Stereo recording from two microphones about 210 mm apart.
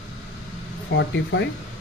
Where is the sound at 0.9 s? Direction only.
60° left (ahead or behind).